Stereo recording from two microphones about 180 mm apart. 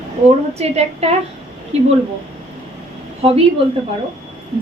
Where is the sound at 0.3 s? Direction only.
35° right (ahead or behind).